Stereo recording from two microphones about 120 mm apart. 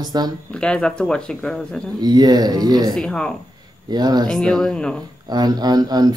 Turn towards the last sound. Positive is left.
turn(degrees=-35)  # may be behind; listen again after turning